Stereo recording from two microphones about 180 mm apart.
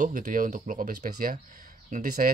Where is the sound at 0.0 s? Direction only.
50° right (ahead or behind).